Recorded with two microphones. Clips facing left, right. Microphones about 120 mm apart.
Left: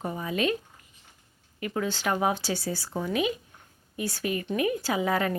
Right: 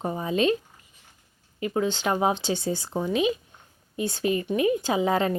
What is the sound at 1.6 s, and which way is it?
A woman's voice, 20° right (ahead or behind).